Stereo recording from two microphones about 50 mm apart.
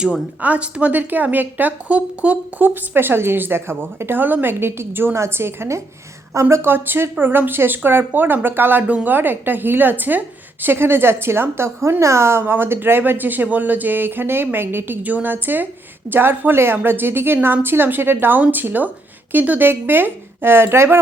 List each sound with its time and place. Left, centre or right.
0.4 s speech: right
2.6 s a woman's voice: right
5.1 s a woman's voice: right
6.5 s a woman's voice: right
15.0 s a woman's voice: right